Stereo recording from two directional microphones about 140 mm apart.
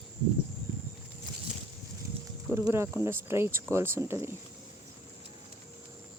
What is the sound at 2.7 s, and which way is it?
Speech, 15° right (ahead or behind).